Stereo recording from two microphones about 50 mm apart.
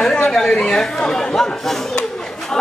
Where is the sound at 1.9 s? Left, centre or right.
Centre.